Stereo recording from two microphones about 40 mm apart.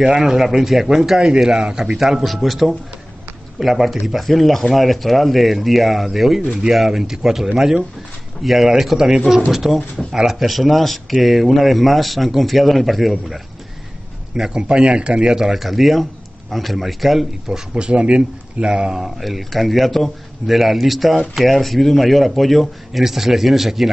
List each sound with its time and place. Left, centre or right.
0.0 s speech: centre
2.0 s speech: centre
8.4 s speech: centre
14.3 s speech: centre
15.3 s speech: centre
17.5 s speech: right
18.9 s speech: centre